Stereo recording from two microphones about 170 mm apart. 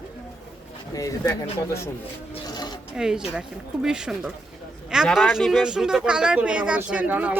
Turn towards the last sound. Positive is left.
turn(degrees=-10)  # may be behind; listen again after turning